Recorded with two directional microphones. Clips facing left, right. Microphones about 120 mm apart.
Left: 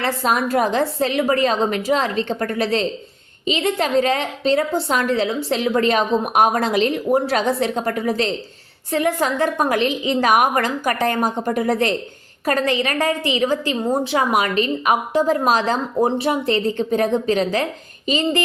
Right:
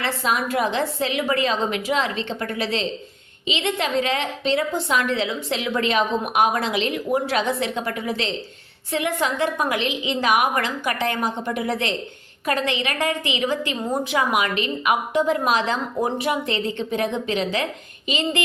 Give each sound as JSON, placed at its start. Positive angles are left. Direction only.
{"t": 0.0, "sound": "a woman's voice", "side_deg": 40}